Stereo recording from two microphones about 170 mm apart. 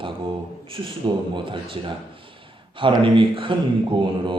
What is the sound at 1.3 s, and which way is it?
Speech, 30° right (ahead or behind).